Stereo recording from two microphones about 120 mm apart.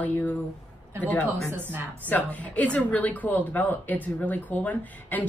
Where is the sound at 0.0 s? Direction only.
15° left (ahead or behind).